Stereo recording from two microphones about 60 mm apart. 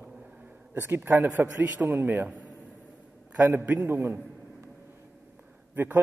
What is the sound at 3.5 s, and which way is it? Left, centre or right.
Speech, right.